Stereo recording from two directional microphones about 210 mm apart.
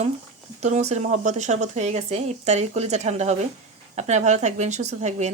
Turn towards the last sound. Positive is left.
turn(degrees=-35)  # may be behind; listen again after turning